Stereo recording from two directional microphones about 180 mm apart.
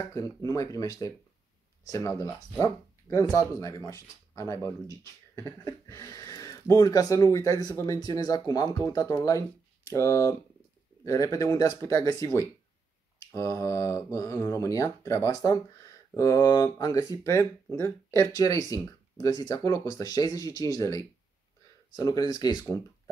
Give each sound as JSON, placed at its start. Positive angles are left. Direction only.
{"t": 0.1, "sound": "speech", "side_deg": 20}